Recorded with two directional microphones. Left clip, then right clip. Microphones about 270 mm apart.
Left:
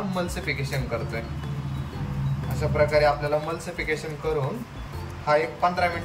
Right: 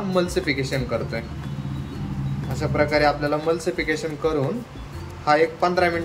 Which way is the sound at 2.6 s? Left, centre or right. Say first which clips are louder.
Right 1 dB; centre.